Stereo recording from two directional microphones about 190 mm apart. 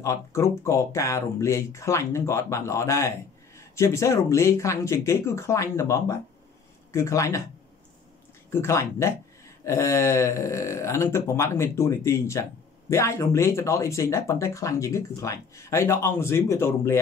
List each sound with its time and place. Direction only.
0.0 s speech: 15° left (ahead or behind)
8.5 s speech: 15° left (ahead or behind)